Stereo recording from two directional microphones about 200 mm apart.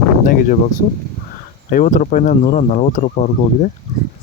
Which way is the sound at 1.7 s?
40° left (ahead or behind).